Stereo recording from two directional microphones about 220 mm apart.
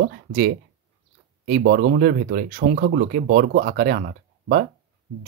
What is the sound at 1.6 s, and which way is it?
Speech, 45° right (ahead or behind).